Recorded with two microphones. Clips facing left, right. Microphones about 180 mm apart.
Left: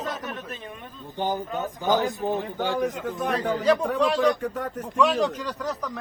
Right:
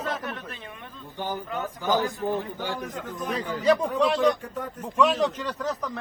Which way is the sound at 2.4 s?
65° left (ahead or behind).